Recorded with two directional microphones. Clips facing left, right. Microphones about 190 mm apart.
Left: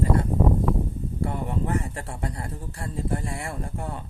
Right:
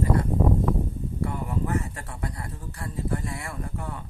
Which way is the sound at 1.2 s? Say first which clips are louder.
Left 1 dB; 30° left (ahead or behind).